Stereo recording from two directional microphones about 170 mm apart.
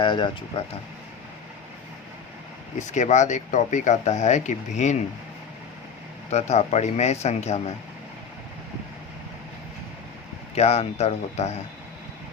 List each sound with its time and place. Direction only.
0.0 s speech: 30° left (ahead or behind)
2.7 s speech: 45° left (ahead or behind)
6.3 s a man's voice: 40° left (ahead or behind)
10.5 s a man's voice: 40° left (ahead or behind)